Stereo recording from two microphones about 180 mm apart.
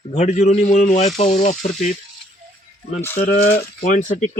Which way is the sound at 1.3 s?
55° left (ahead or behind).